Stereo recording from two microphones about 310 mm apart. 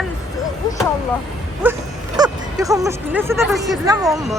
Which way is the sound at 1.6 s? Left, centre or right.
Centre.